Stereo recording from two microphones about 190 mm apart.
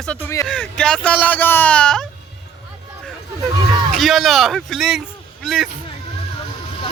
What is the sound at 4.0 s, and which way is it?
A man's voice, centre (ahead or behind).